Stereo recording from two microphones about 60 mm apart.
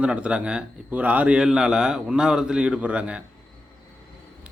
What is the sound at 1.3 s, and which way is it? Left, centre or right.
A man's voice, centre.